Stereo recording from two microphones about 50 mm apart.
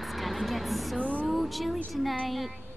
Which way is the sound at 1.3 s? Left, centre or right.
Centre.